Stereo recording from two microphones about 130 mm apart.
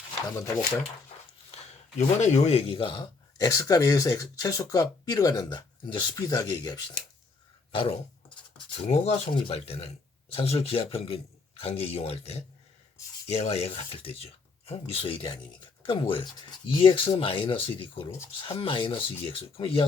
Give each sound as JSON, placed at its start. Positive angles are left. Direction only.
{"t": 2.0, "sound": "speech", "side_deg": 65}
{"t": 7.7, "sound": "a sound", "side_deg": 45}
{"t": 8.9, "sound": "a man's voice", "side_deg": 55}